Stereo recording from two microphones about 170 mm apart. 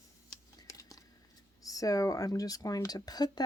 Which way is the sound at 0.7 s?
20° left (ahead or behind).